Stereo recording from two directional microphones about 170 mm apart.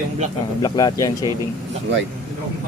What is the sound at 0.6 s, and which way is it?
Speech, 25° left (ahead or behind).